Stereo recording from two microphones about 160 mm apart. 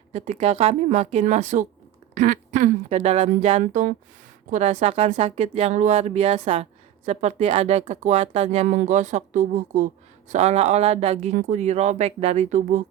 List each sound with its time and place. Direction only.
0.1 s a woman's voice: 40° right (ahead or behind)